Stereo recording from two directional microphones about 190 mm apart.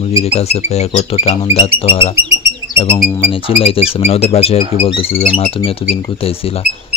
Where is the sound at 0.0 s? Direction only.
35° left (ahead or behind).